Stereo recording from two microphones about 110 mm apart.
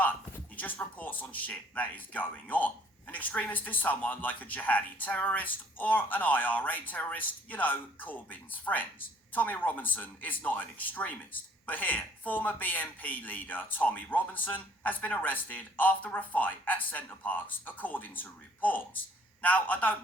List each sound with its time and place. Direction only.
0.0 s speech: 15° left (ahead or behind)